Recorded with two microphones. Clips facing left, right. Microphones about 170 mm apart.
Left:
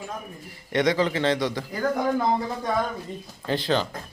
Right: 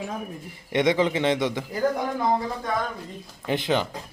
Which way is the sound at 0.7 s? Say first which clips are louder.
Right 1 dB; 20° right (ahead or behind).